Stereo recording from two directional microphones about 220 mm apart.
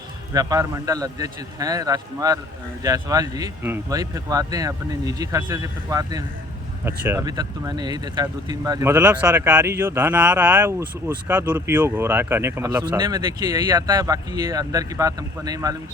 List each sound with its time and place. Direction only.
0.3 s speech: 15° right (ahead or behind)